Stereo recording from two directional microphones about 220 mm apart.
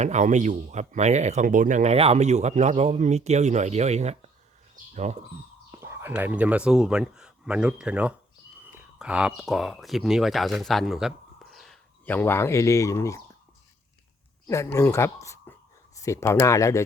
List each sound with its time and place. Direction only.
0.0 s speech: 30° right (ahead or behind)
5.7 s speech: 10° right (ahead or behind); by 13.2 s 15° left (ahead or behind)
14.4 s speech: 15° left (ahead or behind)